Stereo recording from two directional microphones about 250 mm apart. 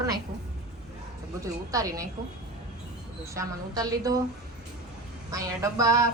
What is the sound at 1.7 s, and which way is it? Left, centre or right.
Speech, centre.